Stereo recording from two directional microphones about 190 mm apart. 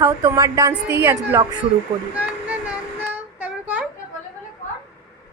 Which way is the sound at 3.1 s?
10° right (ahead or behind).